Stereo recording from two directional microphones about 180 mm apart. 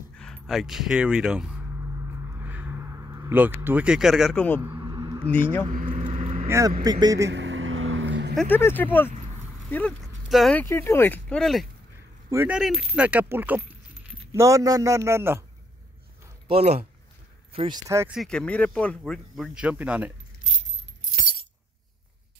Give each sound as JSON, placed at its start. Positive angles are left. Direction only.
{"t": 0.2, "sound": "speech", "side_deg": 0}
{"t": 2.0, "sound": "a sound", "side_deg": -10}
{"t": 4.6, "sound": "a sound", "side_deg": -15}
{"t": 5.3, "sound": "speech", "side_deg": 10}
{"t": 5.7, "sound": "speech", "side_deg": -45}
{"t": 5.9, "sound": "vehicle", "side_deg": -30}
{"t": 6.4, "sound": "speech", "side_deg": -15}
{"t": 7.2, "sound": "vehicle", "side_deg": -85}
{"t": 8.4, "sound": "speech", "side_deg": 10}
{"t": 12.3, "sound": "speech", "side_deg": -10}
{"t": 16.4, "sound": "speech", "side_deg": -35}
{"t": 18.1, "sound": "speech", "side_deg": 5}